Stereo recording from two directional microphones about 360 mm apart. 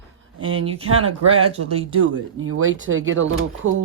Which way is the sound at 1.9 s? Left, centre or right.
Right.